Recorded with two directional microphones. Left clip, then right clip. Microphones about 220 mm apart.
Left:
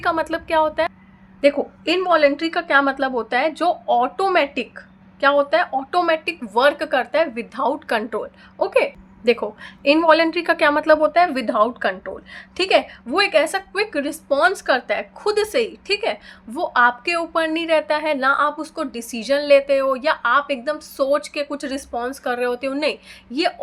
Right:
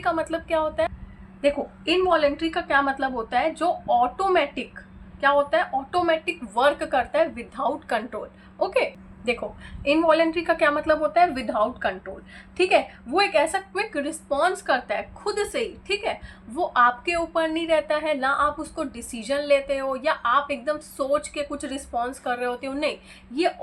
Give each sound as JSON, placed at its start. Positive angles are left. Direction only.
{"t": 0.0, "sound": "a woman's voice", "side_deg": 45}